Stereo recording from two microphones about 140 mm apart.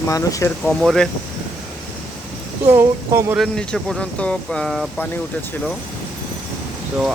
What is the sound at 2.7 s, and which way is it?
Speech, 15° right (ahead or behind).